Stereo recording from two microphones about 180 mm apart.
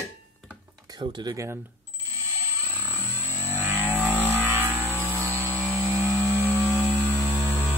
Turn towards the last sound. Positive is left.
turn(degrees=-15)  # may be behind; listen again after turning